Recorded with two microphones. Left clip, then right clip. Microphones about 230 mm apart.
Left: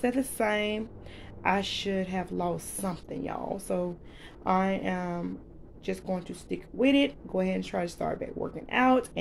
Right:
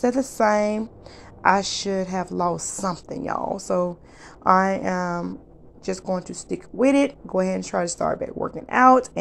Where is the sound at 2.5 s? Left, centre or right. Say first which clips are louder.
Right 8 dB; right.